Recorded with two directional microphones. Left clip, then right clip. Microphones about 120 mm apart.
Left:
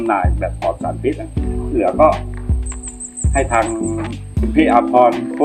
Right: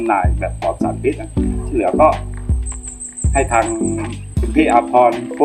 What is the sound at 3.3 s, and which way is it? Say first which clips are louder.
Speech: right 1 dB; centre (ahead or behind).